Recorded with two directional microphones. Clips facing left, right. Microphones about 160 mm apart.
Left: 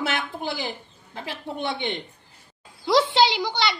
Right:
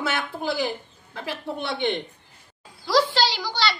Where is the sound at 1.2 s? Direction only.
15° left (ahead or behind).